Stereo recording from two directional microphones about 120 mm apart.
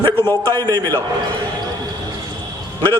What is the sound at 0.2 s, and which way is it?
Speech, 20° left (ahead or behind).